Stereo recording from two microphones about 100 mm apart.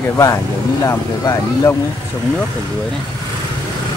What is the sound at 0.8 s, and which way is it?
Speech, 35° left (ahead or behind).